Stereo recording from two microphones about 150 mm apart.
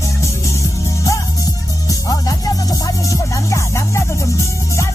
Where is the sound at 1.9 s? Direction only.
25° left (ahead or behind).